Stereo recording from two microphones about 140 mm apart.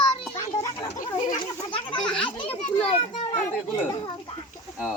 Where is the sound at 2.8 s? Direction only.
45° left (ahead or behind).